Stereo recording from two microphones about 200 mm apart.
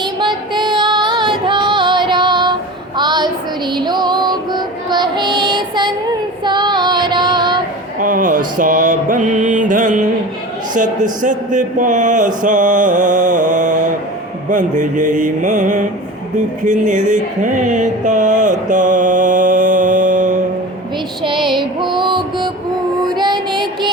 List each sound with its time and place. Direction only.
0.0 s female singing: 20° right (ahead or behind)
3.0 s a sound: 20° right (ahead or behind)
3.8 s music: 20° right (ahead or behind)
6.4 s child singing: 20° right (ahead or behind)
7.9 s mantra: 40° right (ahead or behind)
10.8 s speech: 40° right (ahead or behind)
16.6 s a sound: 40° right (ahead or behind)
21.2 s music: 25° right (ahead or behind)
23.0 s child singing: 20° right (ahead or behind)